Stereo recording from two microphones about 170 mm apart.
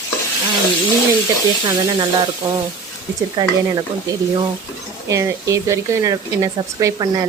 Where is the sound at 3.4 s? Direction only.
25° right (ahead or behind).